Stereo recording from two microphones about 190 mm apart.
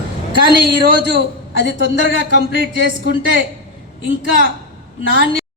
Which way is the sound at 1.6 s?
65° left (ahead or behind).